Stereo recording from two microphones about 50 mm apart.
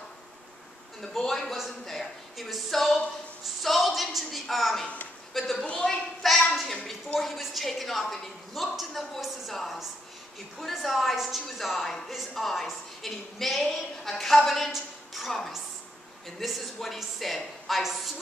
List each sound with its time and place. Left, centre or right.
1.1 s a woman's voice: centre